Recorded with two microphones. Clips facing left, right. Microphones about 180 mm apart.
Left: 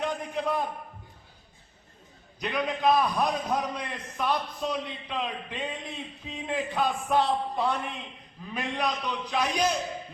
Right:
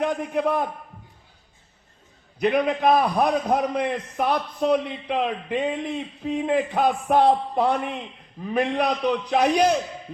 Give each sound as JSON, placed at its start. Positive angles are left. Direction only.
{"t": 0.0, "sound": "a man's voice", "side_deg": -55}
{"t": 2.4, "sound": "a man's voice", "side_deg": -55}